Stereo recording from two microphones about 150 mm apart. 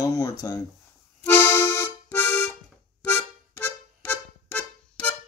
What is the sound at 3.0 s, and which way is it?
Music, 15° left (ahead or behind).